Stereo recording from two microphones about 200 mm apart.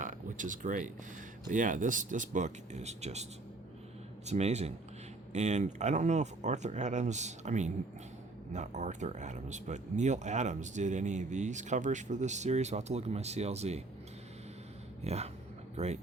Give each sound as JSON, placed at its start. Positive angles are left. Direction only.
{"t": 0.0, "sound": "a sound", "side_deg": -40}
{"t": 1.5, "sound": "speech", "side_deg": -40}
{"t": 4.3, "sound": "speech", "side_deg": -35}
{"t": 15.0, "sound": "speech", "side_deg": -30}